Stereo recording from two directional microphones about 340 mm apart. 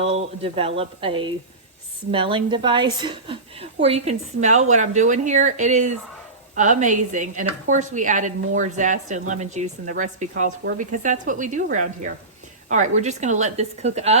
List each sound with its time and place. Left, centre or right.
0.0 s a woman's voice: centre